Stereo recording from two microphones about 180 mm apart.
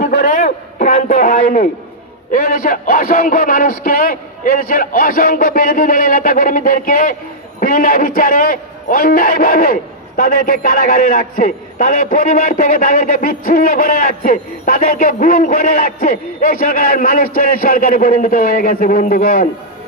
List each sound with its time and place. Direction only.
0.0 s a man's voice: 45° left (ahead or behind)